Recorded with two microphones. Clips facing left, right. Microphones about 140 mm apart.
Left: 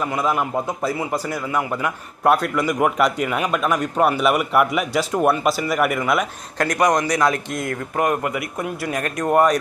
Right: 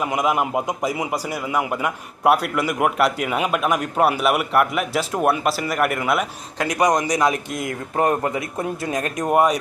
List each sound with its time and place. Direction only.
0.0 s a man's voice: 15° right (ahead or behind)
7.9 s speech: 30° right (ahead or behind); by 9.6 s 10° right (ahead or behind)